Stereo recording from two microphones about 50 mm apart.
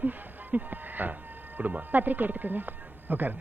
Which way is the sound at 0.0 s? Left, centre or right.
Right.